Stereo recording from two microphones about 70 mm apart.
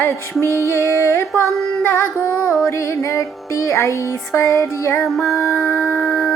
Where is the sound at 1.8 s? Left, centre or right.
Left.